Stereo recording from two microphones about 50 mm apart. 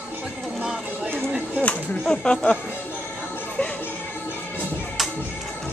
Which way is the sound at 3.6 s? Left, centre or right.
Left.